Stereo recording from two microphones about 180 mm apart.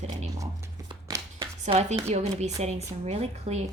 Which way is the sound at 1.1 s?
15° right (ahead or behind).